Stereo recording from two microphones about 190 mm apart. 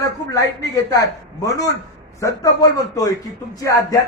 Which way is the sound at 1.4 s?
20° left (ahead or behind).